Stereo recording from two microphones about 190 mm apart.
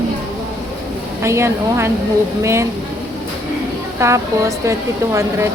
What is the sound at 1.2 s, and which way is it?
A woman's voice, 15° right (ahead or behind).